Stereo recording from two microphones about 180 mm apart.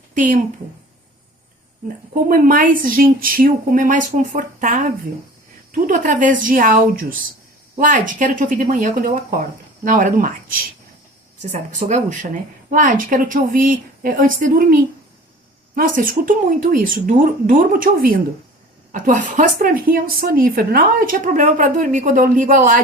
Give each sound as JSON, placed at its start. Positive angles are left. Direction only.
{"t": 0.1, "sound": "speech", "side_deg": -45}
{"t": 2.2, "sound": "a woman's voice", "side_deg": -50}